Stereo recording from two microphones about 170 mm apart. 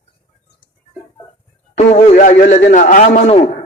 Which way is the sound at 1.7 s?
45° left (ahead or behind).